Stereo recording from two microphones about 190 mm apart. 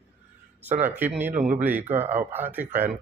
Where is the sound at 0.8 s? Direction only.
10° right (ahead or behind).